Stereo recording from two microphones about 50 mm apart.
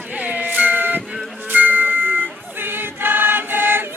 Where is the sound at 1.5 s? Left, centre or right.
Right.